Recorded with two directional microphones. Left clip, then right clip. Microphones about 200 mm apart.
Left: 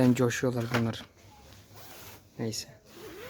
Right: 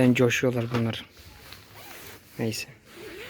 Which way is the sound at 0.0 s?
10° left (ahead or behind).